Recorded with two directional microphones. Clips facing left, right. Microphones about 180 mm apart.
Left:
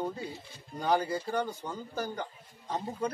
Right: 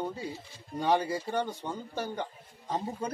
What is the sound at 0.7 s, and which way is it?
Speech, 20° right (ahead or behind).